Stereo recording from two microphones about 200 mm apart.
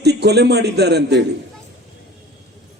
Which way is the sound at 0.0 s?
55° right (ahead or behind).